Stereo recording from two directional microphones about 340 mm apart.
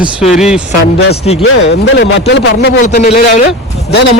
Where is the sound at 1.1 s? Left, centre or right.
Centre.